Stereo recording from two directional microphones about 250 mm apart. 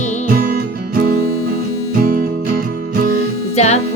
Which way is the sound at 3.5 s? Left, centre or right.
Left.